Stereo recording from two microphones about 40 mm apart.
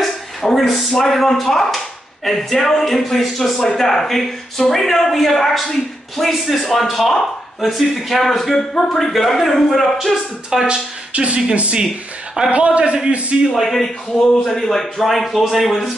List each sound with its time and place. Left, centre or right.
0.0 s a sound: centre
0.7 s a man's voice: centre
10.5 s speech: centre
11.1 s a man's voice: right
13.6 s a man's voice: centre